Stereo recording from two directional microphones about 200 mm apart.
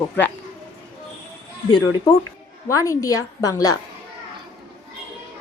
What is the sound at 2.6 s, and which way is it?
A woman's voice, 15° left (ahead or behind).